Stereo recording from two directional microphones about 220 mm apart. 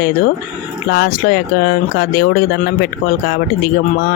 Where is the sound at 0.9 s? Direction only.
45° left (ahead or behind).